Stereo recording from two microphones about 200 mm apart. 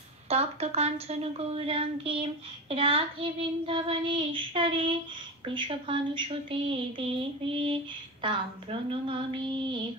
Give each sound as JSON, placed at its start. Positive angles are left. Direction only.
{"t": 0.3, "sound": "a woman's voice", "side_deg": -30}